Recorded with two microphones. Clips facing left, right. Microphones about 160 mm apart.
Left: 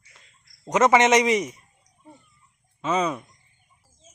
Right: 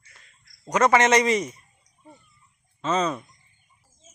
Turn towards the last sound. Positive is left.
turn(degrees=10)  # may be behind; listen again after turning